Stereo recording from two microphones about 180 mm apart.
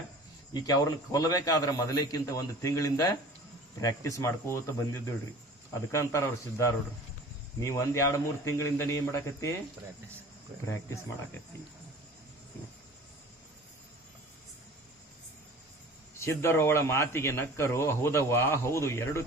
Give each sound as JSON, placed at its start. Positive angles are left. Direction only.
{"t": 0.5, "sound": "a man's voice", "side_deg": 20}
{"t": 16.2, "sound": "a man's voice", "side_deg": 15}